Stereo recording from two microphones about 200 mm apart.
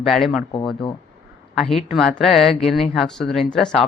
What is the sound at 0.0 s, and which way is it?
Speech, centre (ahead or behind).